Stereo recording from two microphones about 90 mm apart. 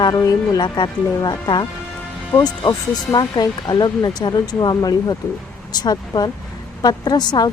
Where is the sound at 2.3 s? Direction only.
30° left (ahead or behind).